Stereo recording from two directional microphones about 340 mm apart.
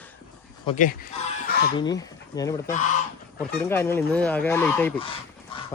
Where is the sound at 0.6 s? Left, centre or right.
Left.